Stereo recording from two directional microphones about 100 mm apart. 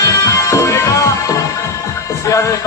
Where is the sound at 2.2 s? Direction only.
35° left (ahead or behind).